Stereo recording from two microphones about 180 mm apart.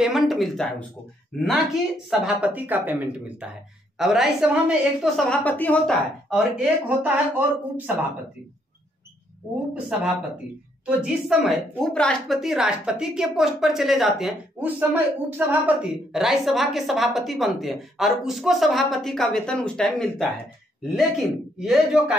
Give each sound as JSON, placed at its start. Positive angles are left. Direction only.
{"t": 0.0, "sound": "a woman's voice", "side_deg": 0}
{"t": 9.9, "sound": "a woman's voice", "side_deg": -5}
{"t": 21.5, "sound": "a woman's voice", "side_deg": -5}